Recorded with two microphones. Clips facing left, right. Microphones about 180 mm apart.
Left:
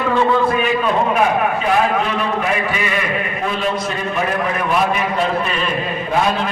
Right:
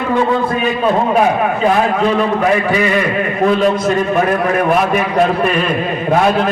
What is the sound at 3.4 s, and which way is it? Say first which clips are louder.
A man's voice: right 10 dB; 45° right (ahead or behind).